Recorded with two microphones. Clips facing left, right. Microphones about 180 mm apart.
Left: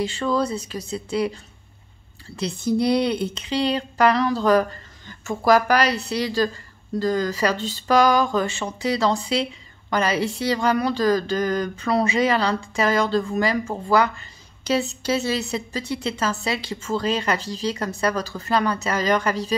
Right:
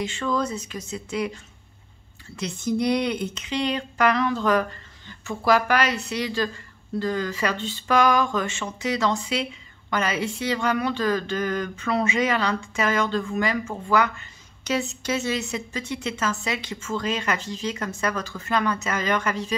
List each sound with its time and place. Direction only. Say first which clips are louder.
0.0 s speech: left 3 dB; 35° left (ahead or behind)